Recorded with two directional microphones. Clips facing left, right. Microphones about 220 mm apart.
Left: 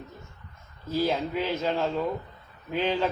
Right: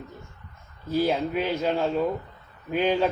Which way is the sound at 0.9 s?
15° right (ahead or behind).